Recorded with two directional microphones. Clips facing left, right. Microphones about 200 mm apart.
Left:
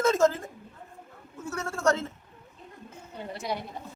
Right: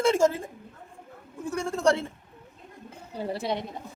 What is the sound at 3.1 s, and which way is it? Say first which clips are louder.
Speech: right 4 dB; 30° right (ahead or behind).